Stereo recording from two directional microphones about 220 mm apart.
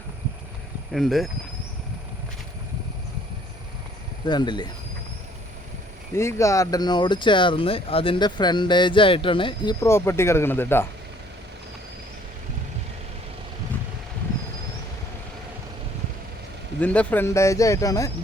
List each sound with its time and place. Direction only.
0.9 s speech: centre (ahead or behind)
4.3 s speech: 20° left (ahead or behind)
6.1 s speech: 10° left (ahead or behind)
16.8 s speech: 5° left (ahead or behind)